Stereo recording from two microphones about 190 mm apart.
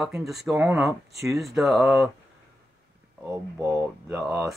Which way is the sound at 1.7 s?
15° right (ahead or behind).